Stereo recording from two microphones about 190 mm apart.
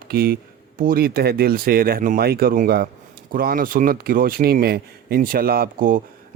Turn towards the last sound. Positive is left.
turn(degrees=-45)  # may be behind; listen again after turning